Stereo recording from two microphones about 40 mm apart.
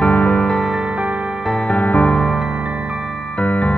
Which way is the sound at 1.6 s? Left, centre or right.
Left.